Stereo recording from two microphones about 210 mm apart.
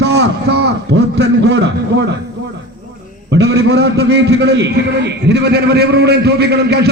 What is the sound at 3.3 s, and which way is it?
A man's voice, 55° right (ahead or behind).